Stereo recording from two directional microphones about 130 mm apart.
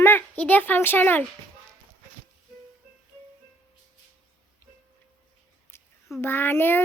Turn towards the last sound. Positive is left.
turn(degrees=15)  # may be behind; listen again after turning